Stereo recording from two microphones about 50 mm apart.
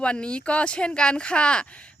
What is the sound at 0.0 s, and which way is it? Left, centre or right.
Speech, left.